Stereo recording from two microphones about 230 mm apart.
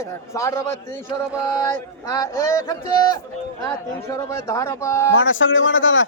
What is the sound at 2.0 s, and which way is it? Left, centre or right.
A man's voice, centre.